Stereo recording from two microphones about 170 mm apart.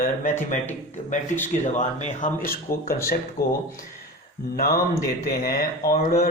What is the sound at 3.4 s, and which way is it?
Mantra, 65° left (ahead or behind).